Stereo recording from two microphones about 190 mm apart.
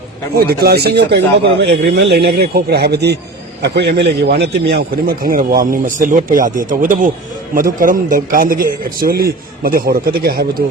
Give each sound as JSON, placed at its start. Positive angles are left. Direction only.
{"t": 0.3, "sound": "a man's voice", "side_deg": -55}